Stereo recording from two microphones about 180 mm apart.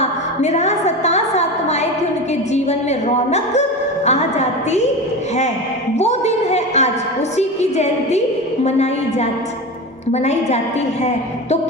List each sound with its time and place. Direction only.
0.0 s music: 40° left (ahead or behind)
4.0 s a woman's voice: 40° left (ahead or behind)
6.0 s a sound: 40° left (ahead or behind)
7.3 s a woman's voice: 40° left (ahead or behind)